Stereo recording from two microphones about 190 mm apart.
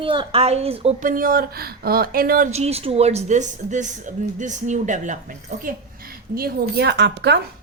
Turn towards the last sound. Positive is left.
turn(degrees=-65)  # may be behind; listen again after turning